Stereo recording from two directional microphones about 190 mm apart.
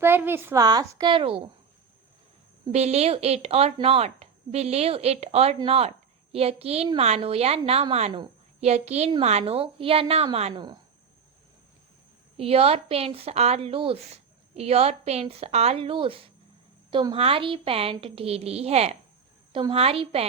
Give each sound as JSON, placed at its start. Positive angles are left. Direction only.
{"t": 0.0, "sound": "a woman's voice", "side_deg": -10}
{"t": 2.7, "sound": "a woman's voice", "side_deg": -35}
{"t": 12.4, "sound": "a woman's voice", "side_deg": -30}